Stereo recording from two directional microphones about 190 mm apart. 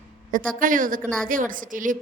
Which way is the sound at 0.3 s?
45° right (ahead or behind).